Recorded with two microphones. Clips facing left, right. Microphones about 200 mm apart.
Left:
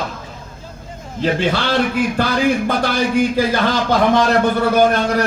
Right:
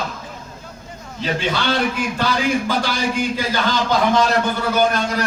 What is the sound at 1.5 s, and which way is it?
A man's voice, 60° left (ahead or behind).